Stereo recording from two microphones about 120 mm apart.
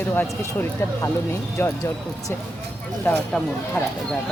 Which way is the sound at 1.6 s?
25° left (ahead or behind).